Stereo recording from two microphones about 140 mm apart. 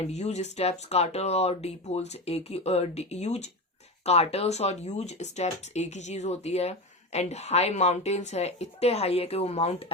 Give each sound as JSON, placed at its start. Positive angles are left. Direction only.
{"t": 0.0, "sound": "speech", "side_deg": 50}